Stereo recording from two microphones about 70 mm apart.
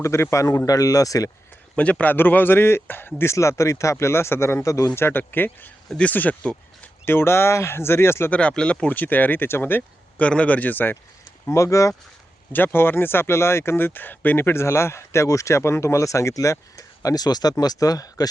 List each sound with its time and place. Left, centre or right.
0.0 s speech: left
1.7 s speech: centre
3.2 s speech: left
4.9 s speech: left
7.0 s speech: left
8.3 s speech: centre
10.2 s speech: centre
11.4 s speech: left
12.5 s speech: left